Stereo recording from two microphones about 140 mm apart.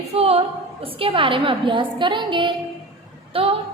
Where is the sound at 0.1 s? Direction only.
45° right (ahead or behind).